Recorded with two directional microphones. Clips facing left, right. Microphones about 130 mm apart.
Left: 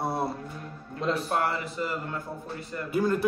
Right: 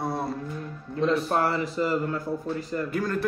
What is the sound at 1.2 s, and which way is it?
Speech, 35° right (ahead or behind).